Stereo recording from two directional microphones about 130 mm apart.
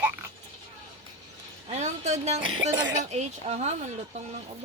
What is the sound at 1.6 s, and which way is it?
Speech, 60° right (ahead or behind).